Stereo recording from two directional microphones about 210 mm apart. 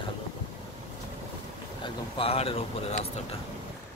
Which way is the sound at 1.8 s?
25° left (ahead or behind).